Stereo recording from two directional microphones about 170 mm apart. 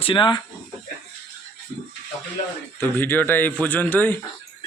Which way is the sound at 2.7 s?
10° left (ahead or behind).